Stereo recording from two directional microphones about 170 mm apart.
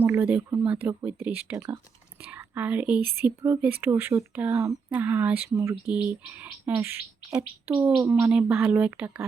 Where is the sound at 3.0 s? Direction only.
65° right (ahead or behind).